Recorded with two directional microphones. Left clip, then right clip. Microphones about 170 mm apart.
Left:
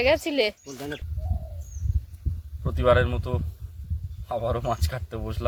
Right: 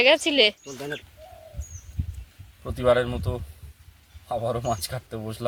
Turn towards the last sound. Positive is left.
turn(degrees=0)  # may be behind; listen again after turning